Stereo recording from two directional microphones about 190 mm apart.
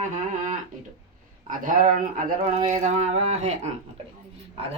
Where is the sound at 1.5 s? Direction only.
45° right (ahead or behind).